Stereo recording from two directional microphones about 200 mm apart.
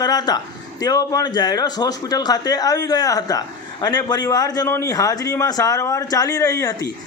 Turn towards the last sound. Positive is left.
turn(degrees=20)  # may be behind; listen again after turning